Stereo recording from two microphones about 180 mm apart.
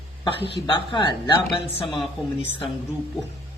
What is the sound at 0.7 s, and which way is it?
Speech, 25° left (ahead or behind).